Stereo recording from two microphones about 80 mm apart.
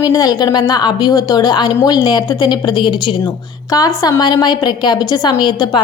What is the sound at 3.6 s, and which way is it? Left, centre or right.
A woman's voice, left.